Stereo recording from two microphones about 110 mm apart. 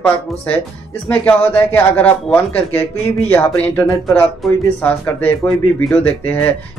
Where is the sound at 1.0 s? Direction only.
15° left (ahead or behind).